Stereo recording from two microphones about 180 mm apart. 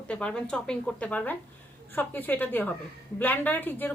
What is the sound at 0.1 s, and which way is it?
A woman's voice, 5° left (ahead or behind).